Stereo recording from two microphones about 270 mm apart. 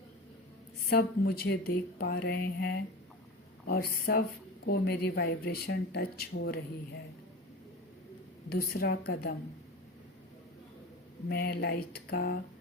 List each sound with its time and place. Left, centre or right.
0.9 s speech: left
8.4 s speech: left
11.3 s speech: left